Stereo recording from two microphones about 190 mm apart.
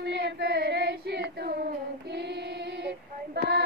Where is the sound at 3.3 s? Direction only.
60° right (ahead or behind).